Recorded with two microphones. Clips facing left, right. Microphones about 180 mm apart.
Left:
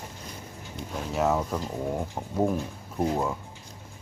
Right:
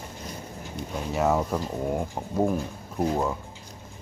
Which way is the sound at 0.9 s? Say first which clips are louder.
Right 1 dB; centre (ahead or behind).